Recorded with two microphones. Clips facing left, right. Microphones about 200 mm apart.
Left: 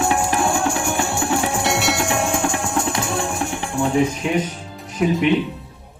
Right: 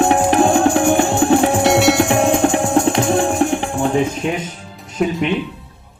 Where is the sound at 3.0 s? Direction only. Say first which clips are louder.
Right 8 dB; 65° right (ahead or behind).